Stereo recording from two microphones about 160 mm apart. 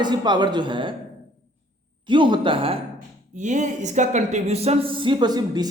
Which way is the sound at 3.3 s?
50° right (ahead or behind).